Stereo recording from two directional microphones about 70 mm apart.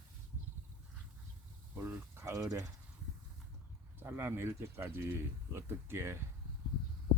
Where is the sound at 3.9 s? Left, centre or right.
Right.